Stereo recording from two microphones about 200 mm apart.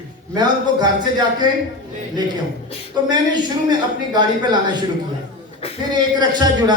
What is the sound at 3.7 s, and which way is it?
Speech, 20° right (ahead or behind).